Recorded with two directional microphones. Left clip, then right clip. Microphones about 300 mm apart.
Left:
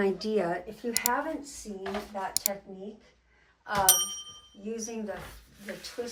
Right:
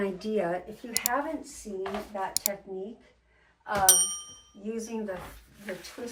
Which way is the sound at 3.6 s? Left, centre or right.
Centre.